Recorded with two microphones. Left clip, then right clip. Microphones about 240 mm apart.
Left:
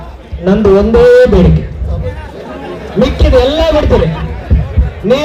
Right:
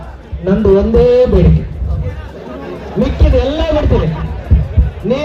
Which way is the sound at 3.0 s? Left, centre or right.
Left.